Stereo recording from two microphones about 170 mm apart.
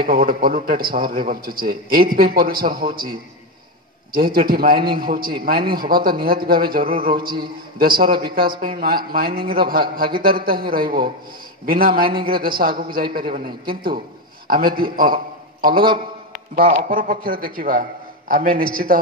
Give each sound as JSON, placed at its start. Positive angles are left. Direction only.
{"t": 0.1, "sound": "a man's voice", "side_deg": -55}
{"t": 4.1, "sound": "a man's voice", "side_deg": -60}
{"t": 12.0, "sound": "a man's voice", "side_deg": -30}
{"t": 12.3, "sound": "a man's voice", "side_deg": -60}